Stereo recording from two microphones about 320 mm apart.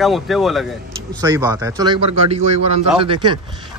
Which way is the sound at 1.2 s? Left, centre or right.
Centre.